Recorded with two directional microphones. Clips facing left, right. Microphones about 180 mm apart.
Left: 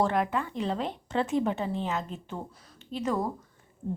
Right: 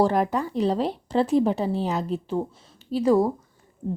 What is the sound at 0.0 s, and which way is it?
A woman's voice, 35° right (ahead or behind).